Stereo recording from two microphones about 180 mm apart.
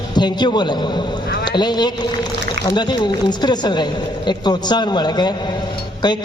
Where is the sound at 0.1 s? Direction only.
25° left (ahead or behind).